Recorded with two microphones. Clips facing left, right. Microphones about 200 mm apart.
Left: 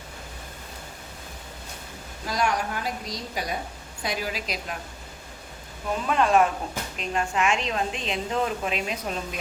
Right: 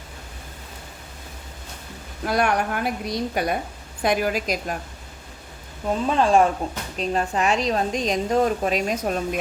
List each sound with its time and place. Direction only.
2.2 s a woman's voice: 60° right (ahead or behind)
6.1 s a woman's voice: 30° right (ahead or behind)